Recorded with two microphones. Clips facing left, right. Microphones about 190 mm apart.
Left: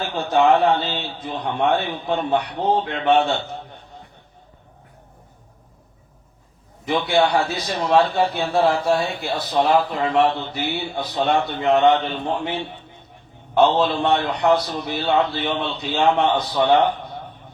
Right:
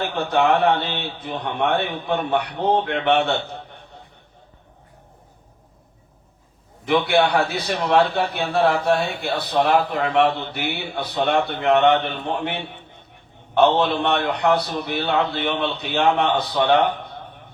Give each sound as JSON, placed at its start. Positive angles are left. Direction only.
{"t": 0.0, "sound": "a man's voice", "side_deg": -60}
{"t": 6.8, "sound": "a man's voice", "side_deg": -60}